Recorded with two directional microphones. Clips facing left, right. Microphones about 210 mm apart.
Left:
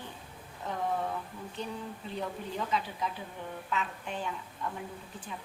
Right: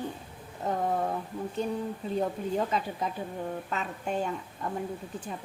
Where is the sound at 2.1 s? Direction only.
45° right (ahead or behind).